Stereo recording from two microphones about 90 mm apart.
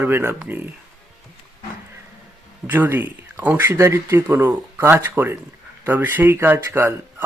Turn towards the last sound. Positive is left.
turn(degrees=-25)  # may be behind; listen again after turning